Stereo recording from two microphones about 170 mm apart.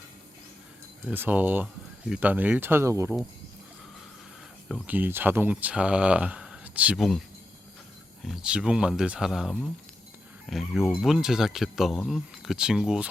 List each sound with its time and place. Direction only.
1.0 s speech: 10° right (ahead or behind)
4.7 s speech: 10° right (ahead or behind)